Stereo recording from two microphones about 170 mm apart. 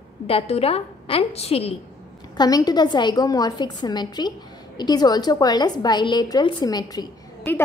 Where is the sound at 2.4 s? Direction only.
20° left (ahead or behind).